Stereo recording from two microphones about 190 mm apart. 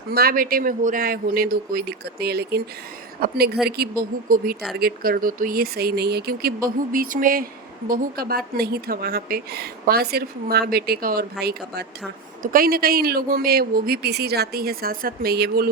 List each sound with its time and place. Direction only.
0.1 s a woman's voice: 55° right (ahead or behind)